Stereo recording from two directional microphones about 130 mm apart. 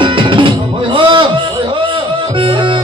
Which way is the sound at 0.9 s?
40° right (ahead or behind).